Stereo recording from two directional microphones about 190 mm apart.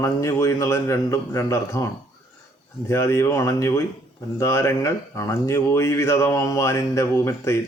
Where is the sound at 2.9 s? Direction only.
15° left (ahead or behind).